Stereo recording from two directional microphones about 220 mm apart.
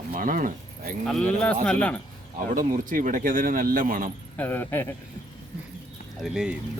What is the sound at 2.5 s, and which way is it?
Speech, 35° right (ahead or behind).